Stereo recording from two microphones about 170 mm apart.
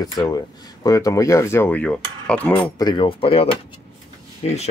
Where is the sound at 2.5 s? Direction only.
25° left (ahead or behind).